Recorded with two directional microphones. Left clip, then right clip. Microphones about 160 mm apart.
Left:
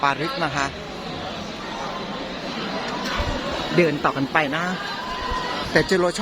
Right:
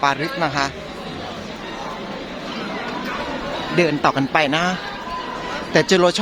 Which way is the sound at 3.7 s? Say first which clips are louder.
Right 3 dB; 40° right (ahead or behind).